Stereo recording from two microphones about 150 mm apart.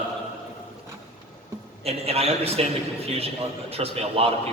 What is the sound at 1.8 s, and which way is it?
A man's voice, 45° right (ahead or behind).